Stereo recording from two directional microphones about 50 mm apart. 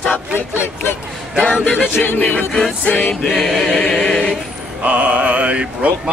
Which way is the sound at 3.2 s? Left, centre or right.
Centre.